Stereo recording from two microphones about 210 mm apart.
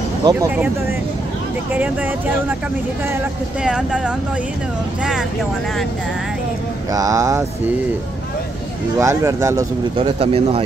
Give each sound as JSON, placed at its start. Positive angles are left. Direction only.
{"t": 0.2, "sound": "speech", "side_deg": -15}
{"t": 3.6, "sound": "speech", "side_deg": -5}
{"t": 6.9, "sound": "speech", "side_deg": -15}
{"t": 8.9, "sound": "speech", "side_deg": -15}
{"t": 9.9, "sound": "speech", "side_deg": -25}